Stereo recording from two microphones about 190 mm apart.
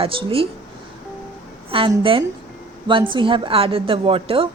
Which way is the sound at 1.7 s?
30° right (ahead or behind).